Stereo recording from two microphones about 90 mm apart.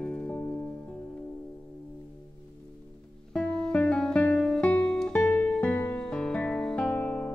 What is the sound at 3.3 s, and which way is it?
Music, 10° left (ahead or behind).